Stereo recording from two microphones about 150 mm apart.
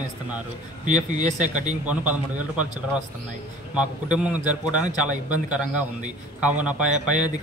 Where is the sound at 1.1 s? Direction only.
55° right (ahead or behind).